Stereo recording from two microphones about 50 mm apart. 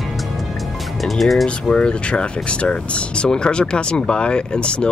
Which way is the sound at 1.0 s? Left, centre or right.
Centre.